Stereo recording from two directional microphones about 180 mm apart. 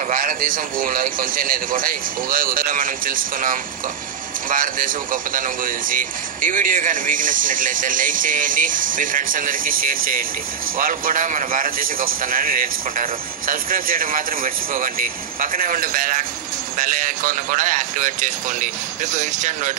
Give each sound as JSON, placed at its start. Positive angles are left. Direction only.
{"t": 0.1, "sound": "a man's voice", "side_deg": -50}